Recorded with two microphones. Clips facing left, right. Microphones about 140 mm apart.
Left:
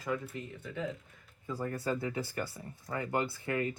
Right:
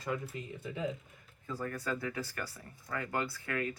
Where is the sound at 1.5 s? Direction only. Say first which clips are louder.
Left 3 dB; 25° left (ahead or behind).